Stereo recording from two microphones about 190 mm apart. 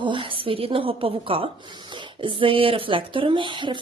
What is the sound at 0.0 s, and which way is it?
A woman's voice, 25° right (ahead or behind).